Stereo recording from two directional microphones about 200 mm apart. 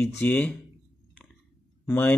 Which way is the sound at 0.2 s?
5° left (ahead or behind).